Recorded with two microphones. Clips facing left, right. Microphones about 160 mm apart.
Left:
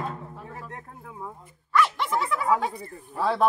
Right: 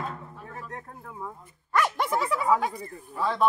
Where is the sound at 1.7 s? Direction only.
45° right (ahead or behind).